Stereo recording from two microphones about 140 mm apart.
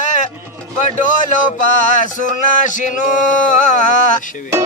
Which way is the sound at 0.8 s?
65° left (ahead or behind).